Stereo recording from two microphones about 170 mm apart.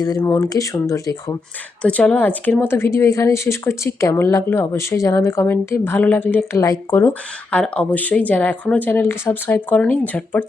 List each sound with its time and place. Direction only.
0.2 s speech: 15° left (ahead or behind)
1.8 s a woman's voice: 5° left (ahead or behind)